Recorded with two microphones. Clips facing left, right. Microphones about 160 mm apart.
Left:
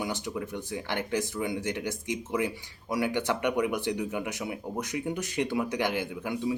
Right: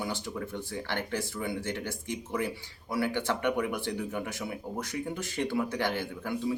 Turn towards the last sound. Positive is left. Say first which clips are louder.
# left 2 dB
turn(degrees=15)  # may be behind; listen again after turning